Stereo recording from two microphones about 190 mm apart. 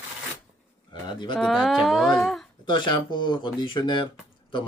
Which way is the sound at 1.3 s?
Centre (ahead or behind).